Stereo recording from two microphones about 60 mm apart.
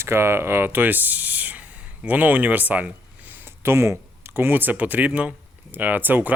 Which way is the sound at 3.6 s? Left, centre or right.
Right.